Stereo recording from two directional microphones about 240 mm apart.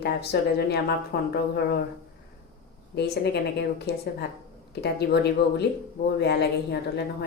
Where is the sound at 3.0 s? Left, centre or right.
Left.